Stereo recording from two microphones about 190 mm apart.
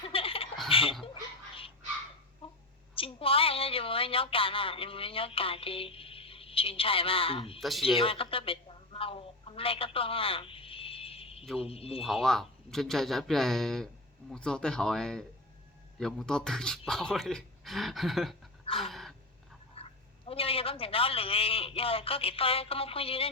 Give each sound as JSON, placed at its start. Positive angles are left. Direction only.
{"t": 0.0, "sound": "chuckle", "side_deg": 30}
{"t": 0.7, "sound": "speech", "side_deg": 30}
{"t": 2.4, "sound": "a sound", "side_deg": 30}
{"t": 2.9, "sound": "a woman's voice", "side_deg": 30}
{"t": 7.6, "sound": "speech", "side_deg": 0}
{"t": 7.9, "sound": "a sound", "side_deg": 30}
{"t": 11.6, "sound": "a man's voice", "side_deg": 30}
{"t": 12.0, "sound": "speech", "side_deg": 0}
{"t": 18.8, "sound": "gasp", "side_deg": 0}
{"t": 19.7, "sound": "a woman's voice", "side_deg": 30}